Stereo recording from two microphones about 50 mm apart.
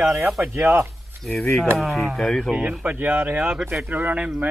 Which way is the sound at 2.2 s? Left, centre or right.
Centre.